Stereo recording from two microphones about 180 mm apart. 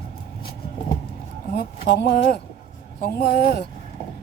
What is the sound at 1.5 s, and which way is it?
Speech, 65° left (ahead or behind).